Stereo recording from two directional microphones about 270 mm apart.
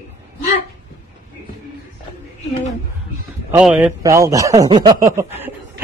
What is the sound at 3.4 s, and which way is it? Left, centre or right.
A man's voice, centre.